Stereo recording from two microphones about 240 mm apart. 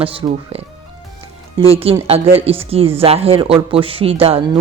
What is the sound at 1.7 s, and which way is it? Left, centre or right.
A woman's voice, right.